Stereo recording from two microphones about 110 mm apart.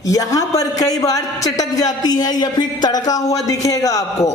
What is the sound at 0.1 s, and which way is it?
A man's voice, 35° left (ahead or behind).